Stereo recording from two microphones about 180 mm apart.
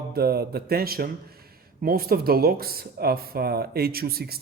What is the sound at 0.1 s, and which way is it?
A man's voice, 60° right (ahead or behind).